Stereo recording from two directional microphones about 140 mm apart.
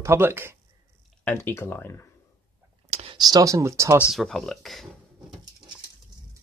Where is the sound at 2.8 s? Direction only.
45° right (ahead or behind).